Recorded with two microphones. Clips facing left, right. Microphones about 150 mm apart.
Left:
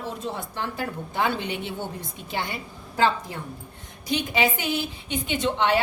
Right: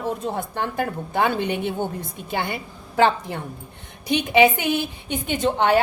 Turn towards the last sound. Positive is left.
turn(degrees=-45)  # may be behind; listen again after turning